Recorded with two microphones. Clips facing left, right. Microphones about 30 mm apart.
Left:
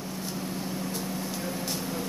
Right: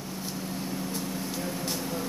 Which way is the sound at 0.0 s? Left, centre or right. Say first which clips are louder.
Left 1 dB; centre.